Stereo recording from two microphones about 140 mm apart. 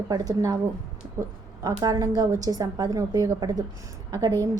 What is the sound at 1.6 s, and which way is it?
A woman's voice, 25° right (ahead or behind).